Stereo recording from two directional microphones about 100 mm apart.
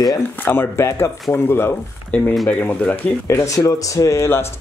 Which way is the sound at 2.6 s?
20° left (ahead or behind).